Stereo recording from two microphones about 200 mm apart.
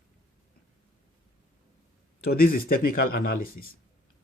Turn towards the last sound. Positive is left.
turn(degrees=45)  # may be behind; listen again after turning